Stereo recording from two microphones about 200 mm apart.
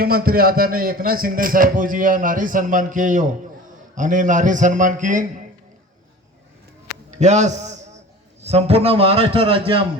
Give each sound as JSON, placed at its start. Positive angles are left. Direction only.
{"t": 0.0, "sound": "a man's voice", "side_deg": -50}
{"t": 7.1, "sound": "a man's voice", "side_deg": -35}